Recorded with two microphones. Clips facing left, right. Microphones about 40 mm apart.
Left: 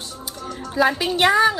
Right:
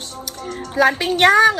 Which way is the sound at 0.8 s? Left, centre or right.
Right.